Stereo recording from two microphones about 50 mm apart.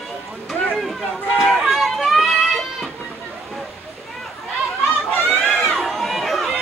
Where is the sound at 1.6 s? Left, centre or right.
Centre.